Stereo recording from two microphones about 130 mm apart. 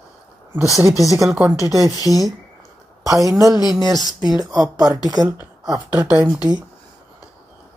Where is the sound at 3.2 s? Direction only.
25° right (ahead or behind).